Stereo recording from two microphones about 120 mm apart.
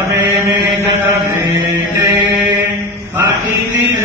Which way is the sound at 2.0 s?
35° right (ahead or behind).